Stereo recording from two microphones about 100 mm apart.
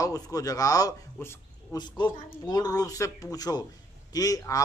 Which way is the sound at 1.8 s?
50° left (ahead or behind).